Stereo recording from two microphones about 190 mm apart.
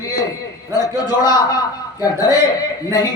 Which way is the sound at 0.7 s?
20° left (ahead or behind).